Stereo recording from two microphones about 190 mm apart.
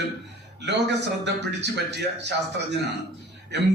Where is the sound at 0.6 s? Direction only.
65° right (ahead or behind).